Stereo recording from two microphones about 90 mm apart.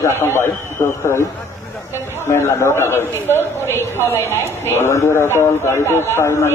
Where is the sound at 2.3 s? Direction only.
30° left (ahead or behind).